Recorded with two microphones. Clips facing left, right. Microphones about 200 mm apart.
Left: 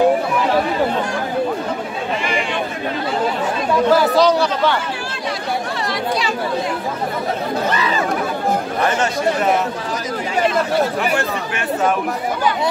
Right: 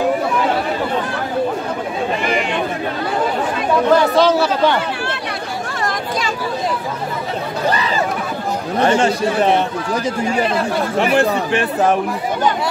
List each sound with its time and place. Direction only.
3.9 s speech: centre (ahead or behind)
8.8 s speech: 30° right (ahead or behind)
11.0 s speech: 30° right (ahead or behind)